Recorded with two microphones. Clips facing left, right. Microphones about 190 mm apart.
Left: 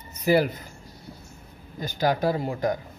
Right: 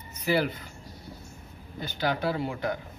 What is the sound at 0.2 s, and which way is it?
Speech, 45° left (ahead or behind).